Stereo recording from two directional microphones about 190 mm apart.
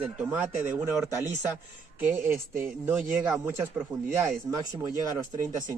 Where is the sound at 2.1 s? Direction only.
10° right (ahead or behind).